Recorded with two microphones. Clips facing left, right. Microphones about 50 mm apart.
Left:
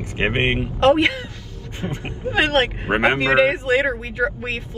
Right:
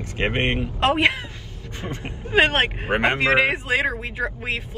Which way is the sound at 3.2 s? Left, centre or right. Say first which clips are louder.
Left 3 dB; right.